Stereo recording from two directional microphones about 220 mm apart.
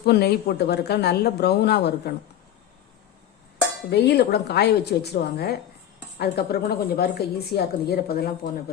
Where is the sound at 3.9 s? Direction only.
50° left (ahead or behind).